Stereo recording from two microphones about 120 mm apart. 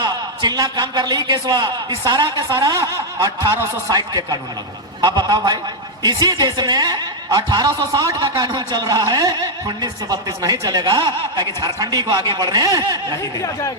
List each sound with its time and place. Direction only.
0.0 s a man's voice: 35° right (ahead or behind)
13.4 s speech: 25° left (ahead or behind)